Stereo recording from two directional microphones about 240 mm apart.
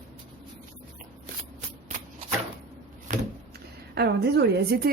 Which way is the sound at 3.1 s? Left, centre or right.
Right.